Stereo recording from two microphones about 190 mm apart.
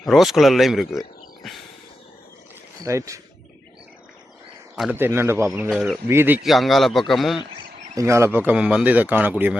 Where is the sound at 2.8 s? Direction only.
15° right (ahead or behind).